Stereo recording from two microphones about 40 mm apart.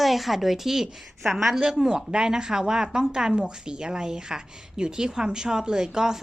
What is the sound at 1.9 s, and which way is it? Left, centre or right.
A woman's voice, right.